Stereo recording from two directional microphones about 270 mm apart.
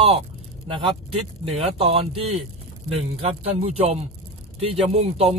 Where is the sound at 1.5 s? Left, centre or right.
Right.